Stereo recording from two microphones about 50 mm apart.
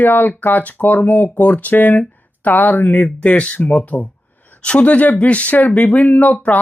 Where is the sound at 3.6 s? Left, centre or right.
Left.